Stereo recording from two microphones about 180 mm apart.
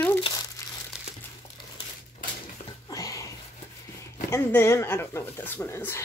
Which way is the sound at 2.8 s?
20° left (ahead or behind).